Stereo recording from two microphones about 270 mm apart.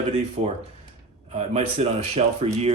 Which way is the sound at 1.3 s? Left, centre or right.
Right.